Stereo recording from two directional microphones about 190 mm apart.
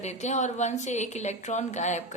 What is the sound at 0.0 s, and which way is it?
A woman's voice, 35° left (ahead or behind).